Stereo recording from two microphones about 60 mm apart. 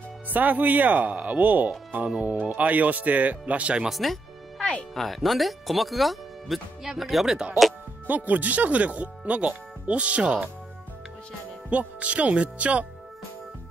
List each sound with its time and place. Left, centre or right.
0.3 s speech: right
3.9 s speech: centre
4.6 s music: centre
4.9 s speech: centre
8.1 s speech: right
11.7 s speech: right